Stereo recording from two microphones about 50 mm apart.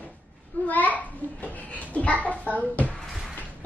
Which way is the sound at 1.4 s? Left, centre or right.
Left.